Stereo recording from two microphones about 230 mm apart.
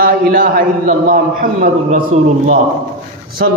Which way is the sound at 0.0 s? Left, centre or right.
Right.